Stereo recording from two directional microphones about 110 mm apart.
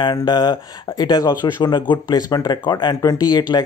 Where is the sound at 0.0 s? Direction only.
40° left (ahead or behind).